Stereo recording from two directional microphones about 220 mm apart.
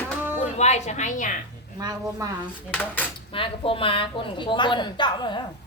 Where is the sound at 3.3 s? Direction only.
25° left (ahead or behind).